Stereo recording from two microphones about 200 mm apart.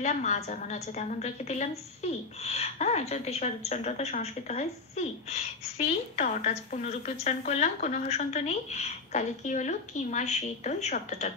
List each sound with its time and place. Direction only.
0.0 s a woman's voice: 35° left (ahead or behind)